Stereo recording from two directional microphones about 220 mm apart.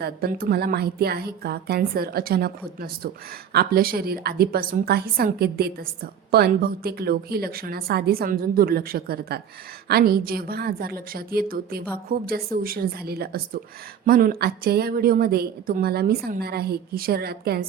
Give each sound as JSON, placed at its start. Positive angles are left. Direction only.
{"t": 0.0, "sound": "a woman's voice", "side_deg": -45}